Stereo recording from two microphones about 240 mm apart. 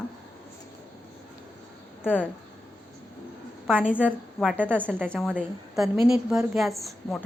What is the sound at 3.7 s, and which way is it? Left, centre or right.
A woman's voice, centre.